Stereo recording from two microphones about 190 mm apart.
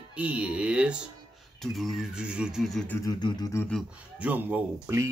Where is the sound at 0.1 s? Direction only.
5° right (ahead or behind).